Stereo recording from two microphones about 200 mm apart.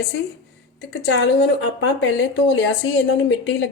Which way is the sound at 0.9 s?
65° left (ahead or behind).